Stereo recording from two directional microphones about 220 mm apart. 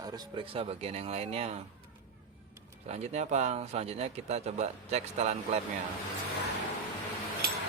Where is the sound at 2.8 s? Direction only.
30° right (ahead or behind).